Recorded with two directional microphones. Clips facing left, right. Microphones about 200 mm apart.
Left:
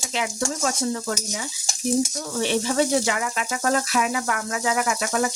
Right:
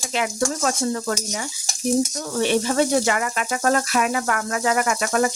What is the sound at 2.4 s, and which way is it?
Speech, 55° right (ahead or behind).